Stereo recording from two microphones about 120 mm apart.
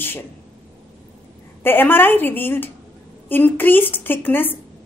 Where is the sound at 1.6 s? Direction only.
15° left (ahead or behind).